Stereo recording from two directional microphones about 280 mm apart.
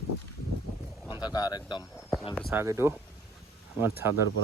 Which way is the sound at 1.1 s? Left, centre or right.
Centre.